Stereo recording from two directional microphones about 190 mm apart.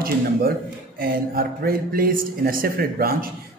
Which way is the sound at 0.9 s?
50° right (ahead or behind).